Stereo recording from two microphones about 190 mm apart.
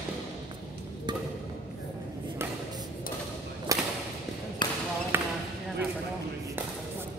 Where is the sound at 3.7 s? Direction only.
20° right (ahead or behind).